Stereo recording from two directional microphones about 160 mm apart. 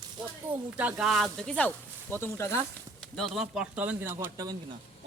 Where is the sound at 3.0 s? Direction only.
5° left (ahead or behind); by 4.5 s 20° right (ahead or behind).